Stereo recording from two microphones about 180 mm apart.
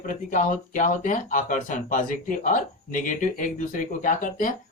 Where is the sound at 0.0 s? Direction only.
45° left (ahead or behind).